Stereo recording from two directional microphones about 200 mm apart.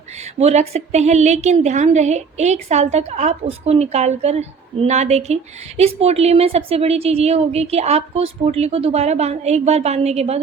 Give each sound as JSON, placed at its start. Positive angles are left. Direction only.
{"t": 0.3, "sound": "a woman's voice", "side_deg": -30}